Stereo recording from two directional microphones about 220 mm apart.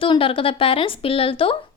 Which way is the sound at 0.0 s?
25° left (ahead or behind).